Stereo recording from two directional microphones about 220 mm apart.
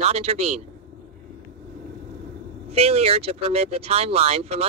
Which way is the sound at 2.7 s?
30° right (ahead or behind).